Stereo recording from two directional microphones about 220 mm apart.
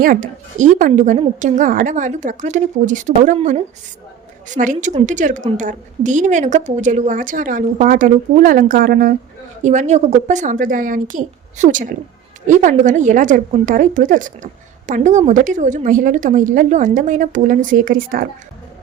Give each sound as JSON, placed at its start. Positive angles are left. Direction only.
{"t": 0.0, "sound": "a woman's voice", "side_deg": -40}